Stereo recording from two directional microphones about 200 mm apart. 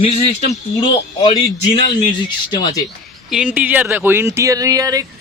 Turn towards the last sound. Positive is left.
turn(degrees=-15)  # may be behind; listen again after turning